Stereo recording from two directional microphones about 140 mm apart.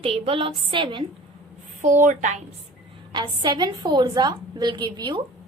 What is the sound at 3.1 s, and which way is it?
A woman's voice, 35° right (ahead or behind).